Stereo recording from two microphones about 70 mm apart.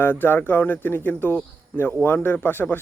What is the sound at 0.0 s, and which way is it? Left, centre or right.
Speech, left.